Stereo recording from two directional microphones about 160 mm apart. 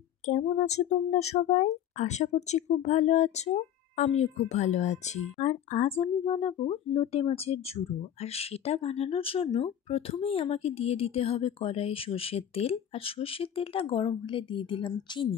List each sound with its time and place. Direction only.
0.2 s speech: 45° left (ahead or behind); by 15.2 s 30° left (ahead or behind)